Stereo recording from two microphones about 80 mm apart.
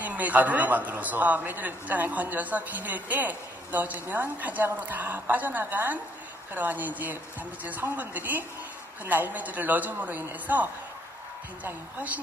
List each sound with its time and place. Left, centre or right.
0.0 s a man's voice: centre